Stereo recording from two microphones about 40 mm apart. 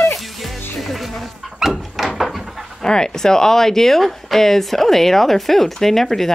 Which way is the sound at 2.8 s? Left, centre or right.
Centre.